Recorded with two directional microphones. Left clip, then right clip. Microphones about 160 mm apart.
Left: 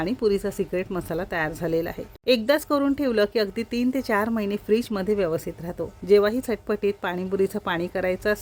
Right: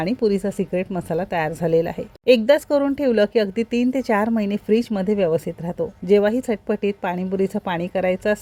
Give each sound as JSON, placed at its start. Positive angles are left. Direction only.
{"t": 0.0, "sound": "speech", "side_deg": -10}